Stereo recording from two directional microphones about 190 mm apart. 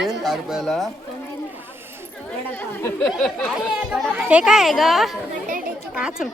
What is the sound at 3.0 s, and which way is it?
A woman's voice, centre (ahead or behind).